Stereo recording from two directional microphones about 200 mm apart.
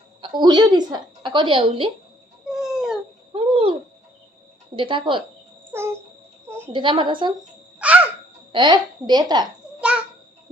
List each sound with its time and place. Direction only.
0.2 s a woman's voice: 20° right (ahead or behind)
2.5 s cat: 5° right (ahead or behind)
3.3 s a sound: 25° right (ahead or behind)
4.8 s a woman's voice: 25° right (ahead or behind)
5.7 s babbling: 10° right (ahead or behind)
6.7 s a woman's voice: 25° right (ahead or behind)
7.8 s a sound: 5° right (ahead or behind)
8.5 s a woman's voice: 20° right (ahead or behind)